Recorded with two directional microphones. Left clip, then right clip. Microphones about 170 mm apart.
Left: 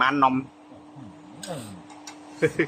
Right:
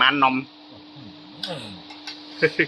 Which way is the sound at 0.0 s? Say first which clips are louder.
Right 3 dB; 5° left (ahead or behind).